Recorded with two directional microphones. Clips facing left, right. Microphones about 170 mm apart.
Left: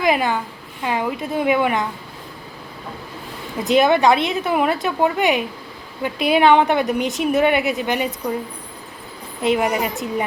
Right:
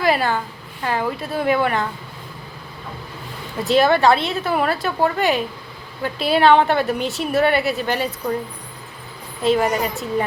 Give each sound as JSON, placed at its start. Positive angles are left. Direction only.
{"t": 0.0, "sound": "a woman's voice", "side_deg": 15}
{"t": 3.6, "sound": "a woman's voice", "side_deg": 15}
{"t": 9.4, "sound": "a woman's voice", "side_deg": 15}